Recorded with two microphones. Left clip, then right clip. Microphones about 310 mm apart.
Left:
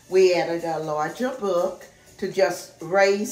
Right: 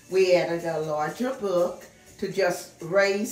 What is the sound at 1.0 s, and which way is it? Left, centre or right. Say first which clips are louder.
Speech: left 2 dB; left.